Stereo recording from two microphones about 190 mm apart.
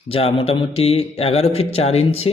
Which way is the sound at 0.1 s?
30° left (ahead or behind).